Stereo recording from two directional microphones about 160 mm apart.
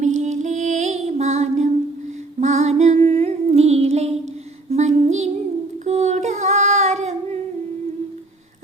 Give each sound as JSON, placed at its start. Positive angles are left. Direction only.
{"t": 0.0, "sound": "music", "side_deg": -45}
{"t": 5.8, "sound": "singing", "side_deg": -45}